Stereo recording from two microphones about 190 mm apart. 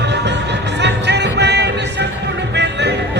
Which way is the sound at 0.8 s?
65° right (ahead or behind).